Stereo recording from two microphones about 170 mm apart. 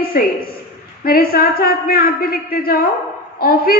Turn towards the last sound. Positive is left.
turn(degrees=60)  # may be behind; listen again after turning